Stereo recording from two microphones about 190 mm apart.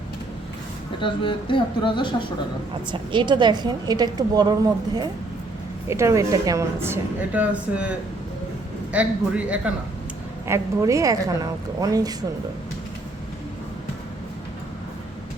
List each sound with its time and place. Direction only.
1.0 s speech: 25° left (ahead or behind)
2.9 s a woman's voice: 25° right (ahead or behind)